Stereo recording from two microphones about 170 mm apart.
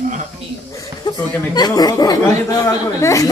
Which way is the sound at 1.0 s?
25° left (ahead or behind).